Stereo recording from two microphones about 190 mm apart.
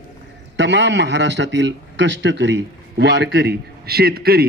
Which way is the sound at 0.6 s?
65° right (ahead or behind).